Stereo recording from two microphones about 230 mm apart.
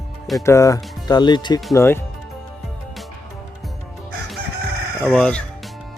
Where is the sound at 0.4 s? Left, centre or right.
Centre.